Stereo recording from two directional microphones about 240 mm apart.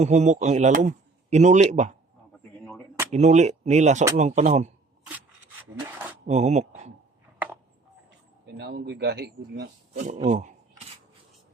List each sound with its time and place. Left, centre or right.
0.0 s a man's voice: right
3.1 s a man's voice: right
6.2 s speech: right
8.5 s speech: right
9.9 s speech: right